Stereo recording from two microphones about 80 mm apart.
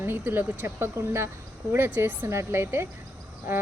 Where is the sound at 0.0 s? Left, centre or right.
Right.